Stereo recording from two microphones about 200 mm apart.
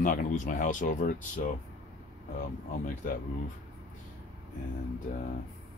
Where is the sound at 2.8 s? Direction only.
40° left (ahead or behind).